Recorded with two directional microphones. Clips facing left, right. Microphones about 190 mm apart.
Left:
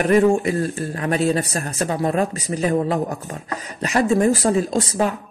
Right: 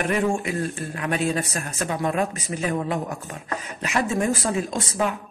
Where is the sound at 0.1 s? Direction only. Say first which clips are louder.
Left 8 dB; 40° left (ahead or behind).